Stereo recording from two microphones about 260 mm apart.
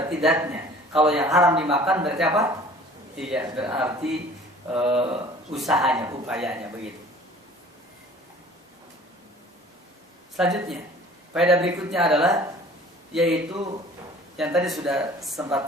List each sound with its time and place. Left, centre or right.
0.0 s a man's voice: centre
4.7 s speech: right
5.5 s speech: centre
10.3 s speech: centre